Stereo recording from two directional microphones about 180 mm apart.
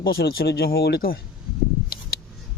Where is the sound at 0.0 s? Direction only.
60° left (ahead or behind).